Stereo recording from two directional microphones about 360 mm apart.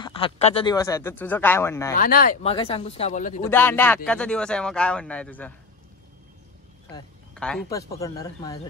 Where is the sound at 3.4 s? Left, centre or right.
Centre.